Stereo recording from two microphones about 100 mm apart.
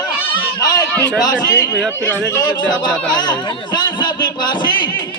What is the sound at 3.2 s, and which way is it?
Speech, 45° left (ahead or behind).